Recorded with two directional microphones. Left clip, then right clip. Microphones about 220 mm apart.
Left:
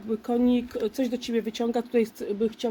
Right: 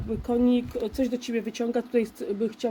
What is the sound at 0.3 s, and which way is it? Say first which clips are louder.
Speech: right 1 dB; 15° left (ahead or behind).